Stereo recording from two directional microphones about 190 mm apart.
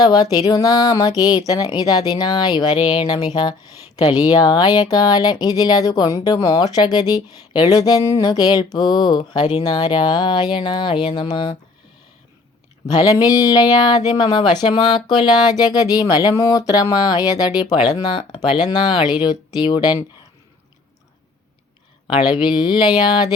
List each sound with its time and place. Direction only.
0.0 s speech: 20° left (ahead or behind)
3.1 s speech: 20° left (ahead or behind)
12.9 s speech: 20° left (ahead or behind)
22.0 s speech: 25° left (ahead or behind)